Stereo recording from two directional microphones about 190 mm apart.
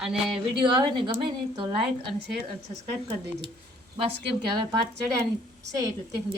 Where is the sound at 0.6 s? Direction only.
25° right (ahead or behind).